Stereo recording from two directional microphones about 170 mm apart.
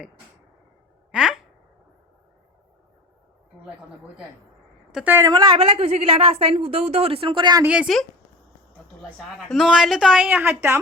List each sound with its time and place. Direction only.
1.1 s a sound: 5° right (ahead or behind)
4.9 s a woman's voice: 5° right (ahead or behind)
5.3 s speech: 25° right (ahead or behind)
5.5 s a woman's voice: 35° right (ahead or behind)
7.6 s a woman's voice: 5° right (ahead or behind)